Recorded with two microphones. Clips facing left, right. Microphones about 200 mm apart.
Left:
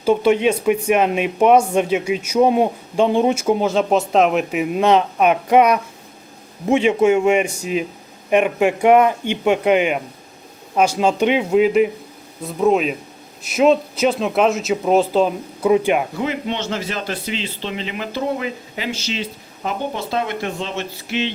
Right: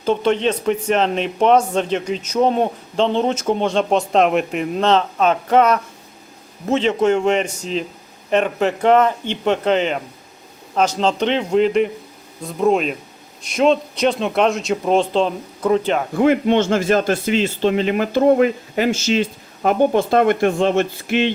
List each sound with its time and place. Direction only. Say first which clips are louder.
0.0 s speech: left 2 dB; 10° left (ahead or behind)
16.1 s speech: right 8 dB; 50° right (ahead or behind)